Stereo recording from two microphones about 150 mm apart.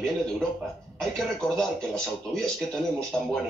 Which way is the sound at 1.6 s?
5° left (ahead or behind).